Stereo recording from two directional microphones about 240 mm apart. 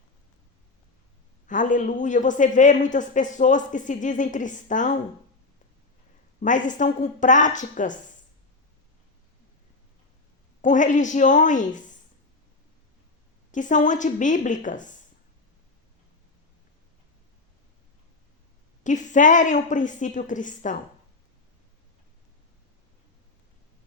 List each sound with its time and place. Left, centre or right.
1.5 s speech: left
6.4 s speech: left
10.6 s speech: left
13.5 s speech: left
18.8 s speech: left